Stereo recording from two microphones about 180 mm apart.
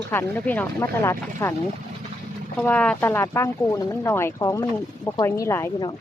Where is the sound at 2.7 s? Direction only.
10° left (ahead or behind).